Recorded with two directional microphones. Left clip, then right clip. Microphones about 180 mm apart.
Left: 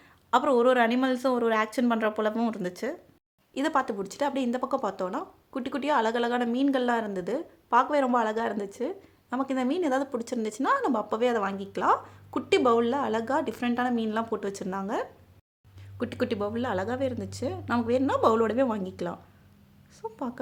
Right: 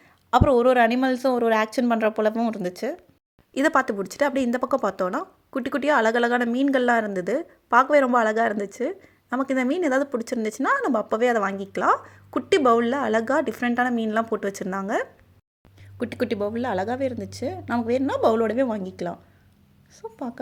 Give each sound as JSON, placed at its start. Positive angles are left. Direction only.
{"t": 0.3, "sound": "speech", "side_deg": -20}
{"t": 3.5, "sound": "a woman's voice", "side_deg": -25}